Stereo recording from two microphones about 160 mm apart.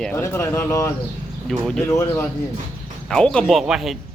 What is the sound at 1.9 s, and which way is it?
Speech, 15° left (ahead or behind).